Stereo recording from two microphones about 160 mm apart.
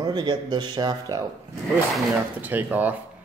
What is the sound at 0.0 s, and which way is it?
Speech, 25° right (ahead or behind).